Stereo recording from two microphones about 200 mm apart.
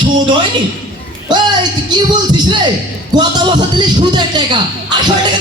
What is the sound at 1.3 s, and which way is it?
A man's voice, 20° right (ahead or behind).